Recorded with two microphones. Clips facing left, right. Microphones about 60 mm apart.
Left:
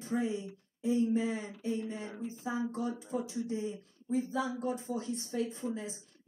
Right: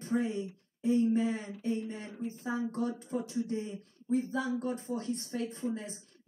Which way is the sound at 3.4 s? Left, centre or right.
Right.